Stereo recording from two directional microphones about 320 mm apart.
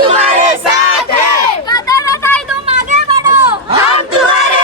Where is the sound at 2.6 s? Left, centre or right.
Centre.